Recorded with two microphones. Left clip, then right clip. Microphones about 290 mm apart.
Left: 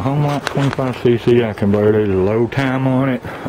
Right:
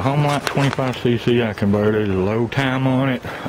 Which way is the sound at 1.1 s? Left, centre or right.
Centre.